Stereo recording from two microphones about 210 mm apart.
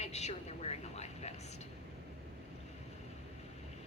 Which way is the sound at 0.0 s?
30° left (ahead or behind).